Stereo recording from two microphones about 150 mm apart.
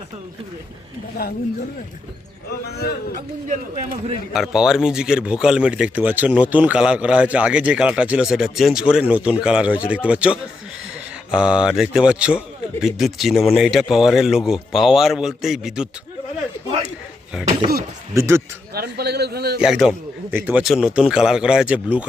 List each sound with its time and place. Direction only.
2.6 s a man's voice: 90° left
3.4 s a man's voice: 55° right (ahead or behind)
4.3 s speech: 5° right (ahead or behind)
18.1 s speech: 20° right (ahead or behind)
18.7 s a man's voice: 90° right
19.5 s speech: 5° right (ahead or behind)